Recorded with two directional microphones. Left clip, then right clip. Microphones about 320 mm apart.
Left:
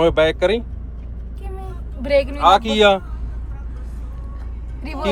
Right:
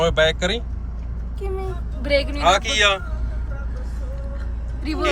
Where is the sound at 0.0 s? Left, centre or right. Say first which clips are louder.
Left 3 dB; centre.